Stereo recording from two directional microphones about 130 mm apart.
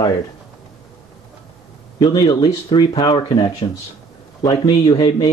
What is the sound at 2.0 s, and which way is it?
Speech, 30° left (ahead or behind).